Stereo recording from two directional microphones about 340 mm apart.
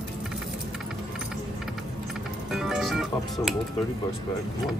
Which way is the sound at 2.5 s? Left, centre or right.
Centre.